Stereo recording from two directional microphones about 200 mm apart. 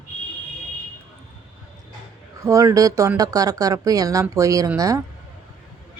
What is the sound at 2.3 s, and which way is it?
Speech, 15° right (ahead or behind).